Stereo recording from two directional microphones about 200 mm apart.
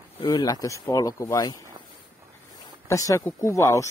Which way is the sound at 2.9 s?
15° left (ahead or behind).